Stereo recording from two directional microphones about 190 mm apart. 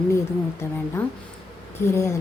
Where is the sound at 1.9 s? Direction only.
15° left (ahead or behind).